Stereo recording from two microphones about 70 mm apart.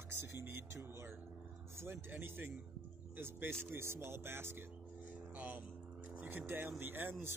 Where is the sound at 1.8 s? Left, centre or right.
Right.